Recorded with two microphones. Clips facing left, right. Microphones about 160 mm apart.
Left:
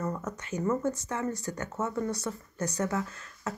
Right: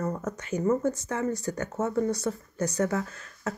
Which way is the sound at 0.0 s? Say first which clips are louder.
Right 3 dB; 35° right (ahead or behind).